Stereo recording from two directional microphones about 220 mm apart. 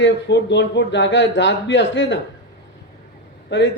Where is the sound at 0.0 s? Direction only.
50° left (ahead or behind).